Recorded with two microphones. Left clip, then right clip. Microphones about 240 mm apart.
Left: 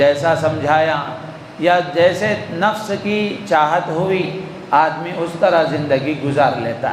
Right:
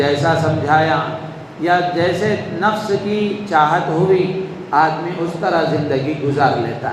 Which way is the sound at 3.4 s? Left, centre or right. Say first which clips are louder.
Even; left.